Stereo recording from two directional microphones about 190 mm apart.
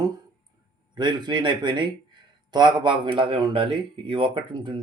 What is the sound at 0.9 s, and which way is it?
Speech, 25° right (ahead or behind).